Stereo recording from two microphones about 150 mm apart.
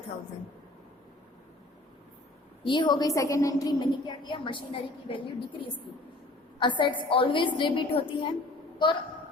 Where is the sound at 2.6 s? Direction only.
30° left (ahead or behind).